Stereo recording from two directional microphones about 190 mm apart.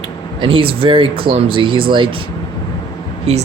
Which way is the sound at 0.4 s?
30° right (ahead or behind).